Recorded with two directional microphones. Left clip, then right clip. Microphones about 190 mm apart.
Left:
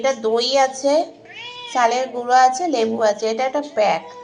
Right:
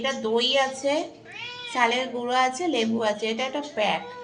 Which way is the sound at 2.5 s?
20° left (ahead or behind).